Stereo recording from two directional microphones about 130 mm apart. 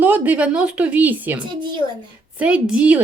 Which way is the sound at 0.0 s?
15° right (ahead or behind).